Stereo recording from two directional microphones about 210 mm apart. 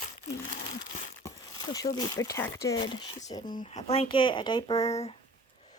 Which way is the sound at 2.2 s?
15° left (ahead or behind).